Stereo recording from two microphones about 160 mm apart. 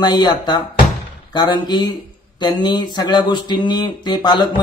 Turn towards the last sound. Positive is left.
turn(degrees=30)  # may be behind; listen again after turning